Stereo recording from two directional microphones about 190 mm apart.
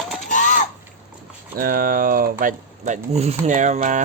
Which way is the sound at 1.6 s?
50° right (ahead or behind).